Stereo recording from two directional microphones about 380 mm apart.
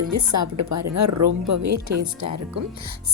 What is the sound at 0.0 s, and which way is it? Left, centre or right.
Speech, right.